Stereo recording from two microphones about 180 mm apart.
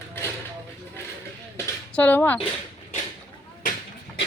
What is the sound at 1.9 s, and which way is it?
Speech, 10° left (ahead or behind).